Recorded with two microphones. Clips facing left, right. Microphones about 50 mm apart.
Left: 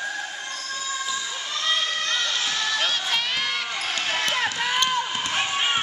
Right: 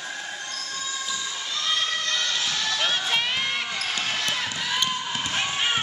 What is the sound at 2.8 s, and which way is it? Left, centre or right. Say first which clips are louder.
Crowd: even; right.